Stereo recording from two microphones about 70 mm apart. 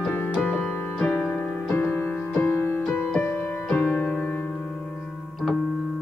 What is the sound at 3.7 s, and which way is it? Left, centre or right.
Piano, left.